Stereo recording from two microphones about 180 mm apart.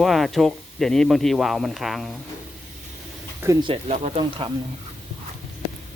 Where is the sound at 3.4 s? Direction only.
25° right (ahead or behind).